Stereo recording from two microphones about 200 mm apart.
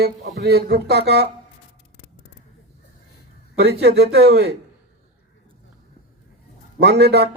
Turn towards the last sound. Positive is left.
turn(degrees=-55)  # may be behind; listen again after turning